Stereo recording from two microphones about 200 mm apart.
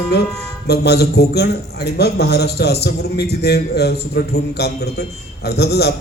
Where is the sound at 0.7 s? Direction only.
55° left (ahead or behind).